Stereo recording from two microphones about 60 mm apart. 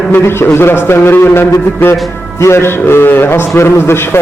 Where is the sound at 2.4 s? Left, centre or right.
Left.